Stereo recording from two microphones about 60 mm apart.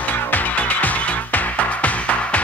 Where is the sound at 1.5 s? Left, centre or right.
Left.